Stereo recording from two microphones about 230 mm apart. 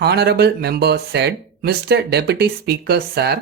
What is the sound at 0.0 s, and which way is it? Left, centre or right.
Speech, right.